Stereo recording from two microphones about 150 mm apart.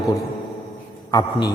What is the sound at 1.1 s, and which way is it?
Speech, 25° left (ahead or behind).